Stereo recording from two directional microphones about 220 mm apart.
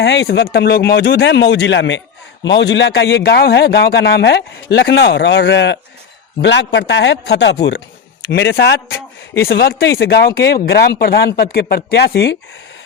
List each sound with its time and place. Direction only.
0.0 s a man's voice: 50° left (ahead or behind)